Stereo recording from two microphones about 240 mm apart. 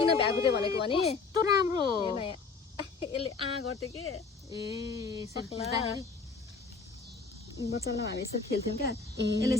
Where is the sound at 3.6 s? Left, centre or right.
Left.